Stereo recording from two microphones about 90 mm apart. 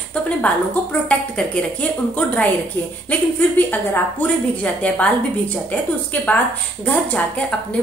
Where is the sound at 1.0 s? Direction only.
15° left (ahead or behind).